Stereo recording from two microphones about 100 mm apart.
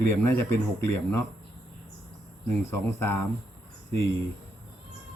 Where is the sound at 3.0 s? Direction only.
25° left (ahead or behind).